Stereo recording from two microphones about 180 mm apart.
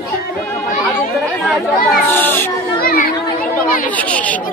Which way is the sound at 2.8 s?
55° left (ahead or behind).